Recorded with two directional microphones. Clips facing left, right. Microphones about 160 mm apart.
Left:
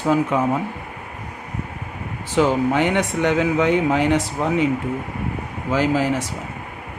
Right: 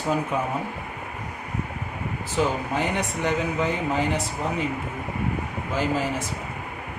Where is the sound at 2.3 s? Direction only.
90° left.